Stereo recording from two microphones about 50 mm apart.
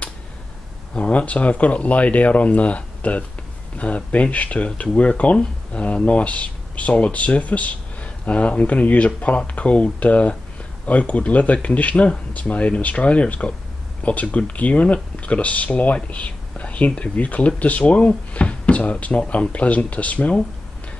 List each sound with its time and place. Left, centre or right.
0.9 s speech: left